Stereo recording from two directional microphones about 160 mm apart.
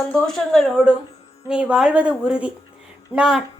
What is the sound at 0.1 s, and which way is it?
A woman's voice, 5° left (ahead or behind).